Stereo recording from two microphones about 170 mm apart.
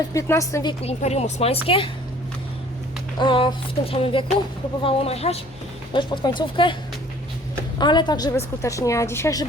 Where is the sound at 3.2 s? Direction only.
30° left (ahead or behind).